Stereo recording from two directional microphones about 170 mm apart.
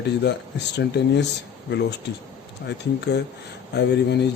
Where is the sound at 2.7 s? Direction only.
90° left.